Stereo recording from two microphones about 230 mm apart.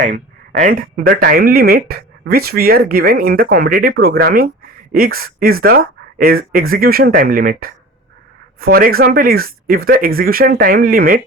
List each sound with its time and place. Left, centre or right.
0.0 s speech: right